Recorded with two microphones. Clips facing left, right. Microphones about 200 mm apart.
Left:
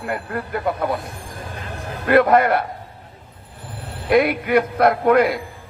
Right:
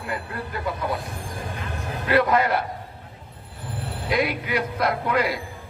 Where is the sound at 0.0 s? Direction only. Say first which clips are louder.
Left 5 dB; 55° left (ahead or behind).